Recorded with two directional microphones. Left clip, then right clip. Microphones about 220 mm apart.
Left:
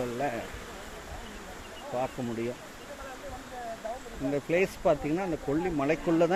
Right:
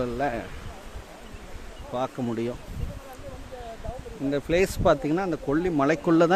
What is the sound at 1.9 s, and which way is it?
Speech, 35° right (ahead or behind).